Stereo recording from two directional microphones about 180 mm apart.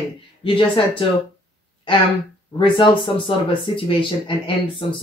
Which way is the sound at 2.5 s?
25° left (ahead or behind).